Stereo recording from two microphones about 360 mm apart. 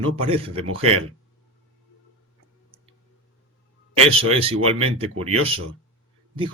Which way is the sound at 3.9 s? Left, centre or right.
Centre.